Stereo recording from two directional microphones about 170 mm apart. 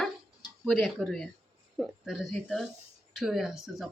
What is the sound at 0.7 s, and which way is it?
Speech, centre (ahead or behind).